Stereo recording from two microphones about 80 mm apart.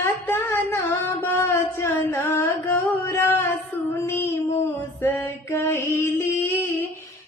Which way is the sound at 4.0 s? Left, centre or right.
Left.